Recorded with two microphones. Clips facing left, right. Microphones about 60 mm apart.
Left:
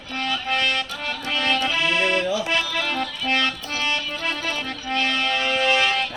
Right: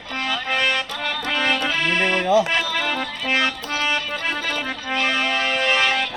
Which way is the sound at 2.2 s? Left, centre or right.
Right.